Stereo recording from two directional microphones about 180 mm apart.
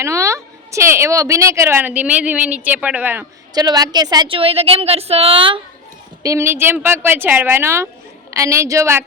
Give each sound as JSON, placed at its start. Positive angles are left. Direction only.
{"t": 0.0, "sound": "a woman's voice", "side_deg": -15}
{"t": 3.5, "sound": "a woman's voice", "side_deg": -20}
{"t": 6.2, "sound": "a woman's voice", "side_deg": -15}